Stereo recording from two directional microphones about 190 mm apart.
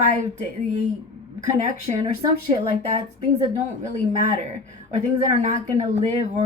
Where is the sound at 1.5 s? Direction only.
40° right (ahead or behind).